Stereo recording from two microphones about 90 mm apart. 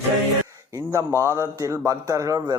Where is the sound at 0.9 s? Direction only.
30° right (ahead or behind).